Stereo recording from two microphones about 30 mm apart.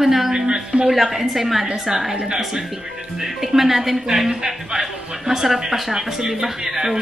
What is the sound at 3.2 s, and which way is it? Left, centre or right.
A woman's voice, centre.